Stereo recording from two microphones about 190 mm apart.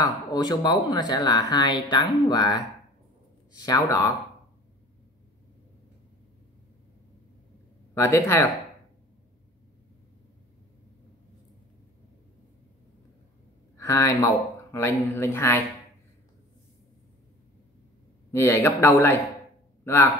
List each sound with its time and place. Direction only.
0.0 s speech: 20° left (ahead or behind)
7.9 s speech: 15° left (ahead or behind)
13.7 s speech: 15° left (ahead or behind)
18.3 s speech: 15° left (ahead or behind)